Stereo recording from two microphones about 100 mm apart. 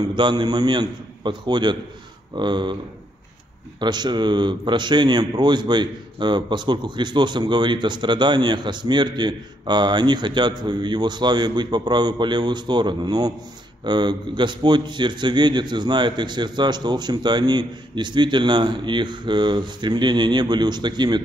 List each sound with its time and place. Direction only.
0.0 s speech: 50° right (ahead or behind)
3.8 s speech: 45° right (ahead or behind)